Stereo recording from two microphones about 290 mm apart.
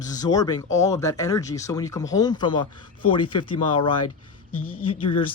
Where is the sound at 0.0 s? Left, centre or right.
Centre.